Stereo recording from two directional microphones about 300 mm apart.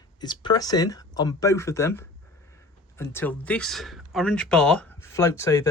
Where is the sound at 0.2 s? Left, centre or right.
Centre.